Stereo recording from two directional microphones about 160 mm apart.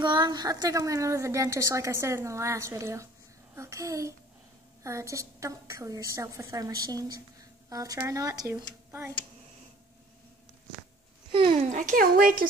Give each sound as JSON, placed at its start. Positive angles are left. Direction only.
{"t": 0.0, "sound": "a woman's voice", "side_deg": -25}
{"t": 11.5, "sound": "speech", "side_deg": -55}